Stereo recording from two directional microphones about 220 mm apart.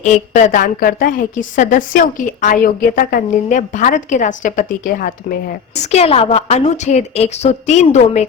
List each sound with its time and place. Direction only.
0.0 s a woman's voice: 35° left (ahead or behind)